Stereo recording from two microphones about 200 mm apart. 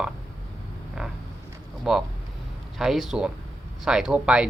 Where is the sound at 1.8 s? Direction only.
Centre (ahead or behind).